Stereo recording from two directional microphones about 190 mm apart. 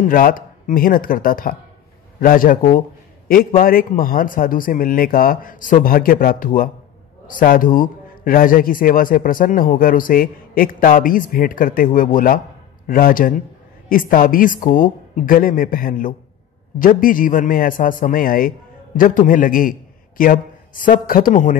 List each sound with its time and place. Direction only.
0.0 s a man's voice: 45° left (ahead or behind)